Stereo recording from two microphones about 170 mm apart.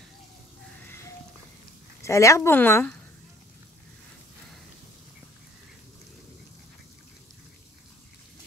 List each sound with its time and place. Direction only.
2.0 s a woman's voice: 20° left (ahead or behind)